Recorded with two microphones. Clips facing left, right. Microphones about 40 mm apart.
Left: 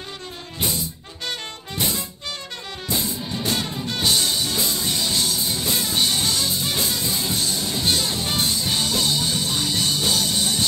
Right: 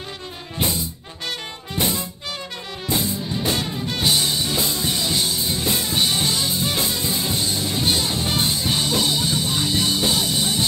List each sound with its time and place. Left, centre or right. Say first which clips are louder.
1.8 s music: right 3 dB; centre
3.0 s music: right 2 dB; centre